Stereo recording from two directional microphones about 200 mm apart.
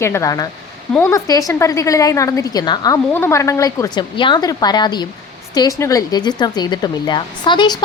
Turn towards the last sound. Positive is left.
turn(degrees=20)  # may be behind; listen again after turning